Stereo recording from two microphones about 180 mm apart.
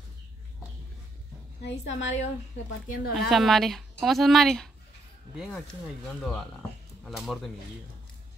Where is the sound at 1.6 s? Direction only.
90° left.